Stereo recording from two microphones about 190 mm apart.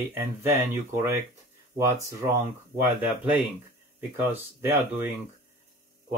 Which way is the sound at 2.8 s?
10° right (ahead or behind).